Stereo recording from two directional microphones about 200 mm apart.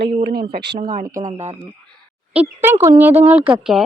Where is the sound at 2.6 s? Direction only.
15° right (ahead or behind).